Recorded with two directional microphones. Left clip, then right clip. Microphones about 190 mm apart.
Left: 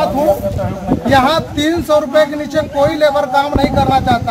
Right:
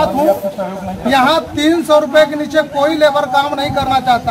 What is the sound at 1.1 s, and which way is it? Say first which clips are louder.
Speech: even; 10° right (ahead or behind).